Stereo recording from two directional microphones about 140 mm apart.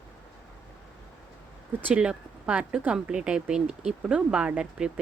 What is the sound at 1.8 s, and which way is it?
Speech, 10° right (ahead or behind).